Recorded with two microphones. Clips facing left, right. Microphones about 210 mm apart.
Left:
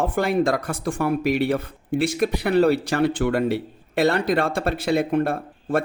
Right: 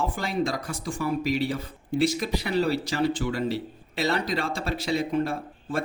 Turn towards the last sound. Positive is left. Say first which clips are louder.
# left 7 dB
turn(degrees=55)  # may be behind; listen again after turning